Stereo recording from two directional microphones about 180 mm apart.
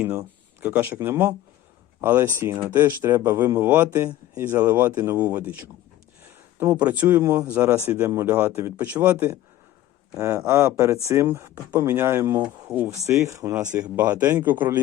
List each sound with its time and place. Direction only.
0.0 s speech: 10° right (ahead or behind)